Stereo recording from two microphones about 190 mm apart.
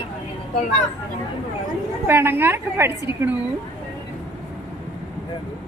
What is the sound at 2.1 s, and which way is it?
Speech, 10° right (ahead or behind).